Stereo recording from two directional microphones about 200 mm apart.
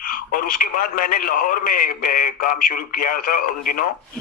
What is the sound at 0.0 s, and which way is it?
A man's voice, 45° left (ahead or behind).